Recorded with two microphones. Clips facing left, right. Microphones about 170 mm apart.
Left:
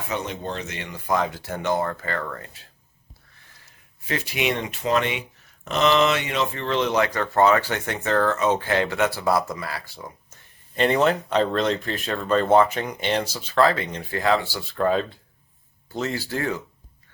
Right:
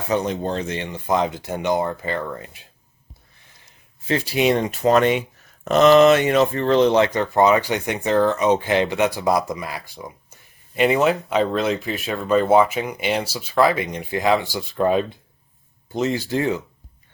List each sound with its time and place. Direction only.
0.1 s speech: 35° right (ahead or behind); by 2.6 s 15° right (ahead or behind)
3.7 s speech: 30° right (ahead or behind)